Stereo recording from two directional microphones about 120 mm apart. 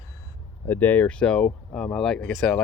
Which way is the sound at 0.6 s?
15° left (ahead or behind).